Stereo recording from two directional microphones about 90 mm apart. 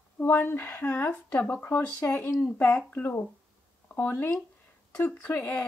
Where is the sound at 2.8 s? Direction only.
20° left (ahead or behind).